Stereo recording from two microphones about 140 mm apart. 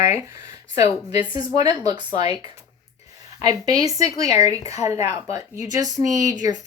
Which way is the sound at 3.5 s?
25° right (ahead or behind).